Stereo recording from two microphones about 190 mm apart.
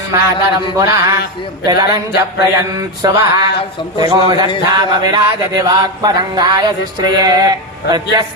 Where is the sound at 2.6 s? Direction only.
20° right (ahead or behind).